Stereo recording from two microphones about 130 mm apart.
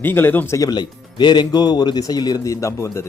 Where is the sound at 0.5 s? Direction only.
30° left (ahead or behind).